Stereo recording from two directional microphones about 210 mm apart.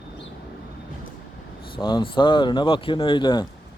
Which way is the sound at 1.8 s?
20° left (ahead or behind).